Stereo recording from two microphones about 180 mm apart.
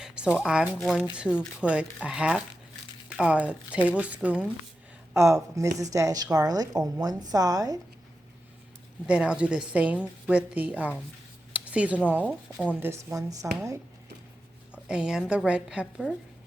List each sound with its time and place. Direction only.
0.0 s a sound: 5° right (ahead or behind)
0.4 s a woman's voice: 5° right (ahead or behind)
9.0 s a woman's voice: 5° right (ahead or behind)
14.8 s a woman's voice: 5° right (ahead or behind)